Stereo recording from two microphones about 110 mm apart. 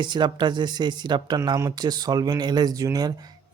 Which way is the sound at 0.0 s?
45° right (ahead or behind).